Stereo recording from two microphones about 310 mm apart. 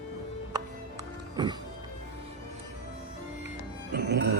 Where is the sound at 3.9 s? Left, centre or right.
Right.